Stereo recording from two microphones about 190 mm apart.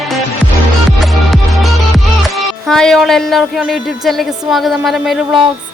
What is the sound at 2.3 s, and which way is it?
A woman's voice, centre (ahead or behind).